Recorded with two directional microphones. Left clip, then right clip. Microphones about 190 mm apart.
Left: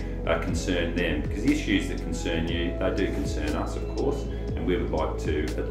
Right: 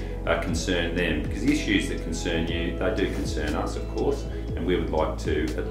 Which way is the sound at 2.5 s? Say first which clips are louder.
Right 1 dB; 20° right (ahead or behind).